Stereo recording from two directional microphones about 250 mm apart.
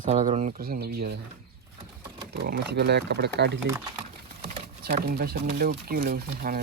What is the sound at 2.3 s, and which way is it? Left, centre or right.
Speech, right.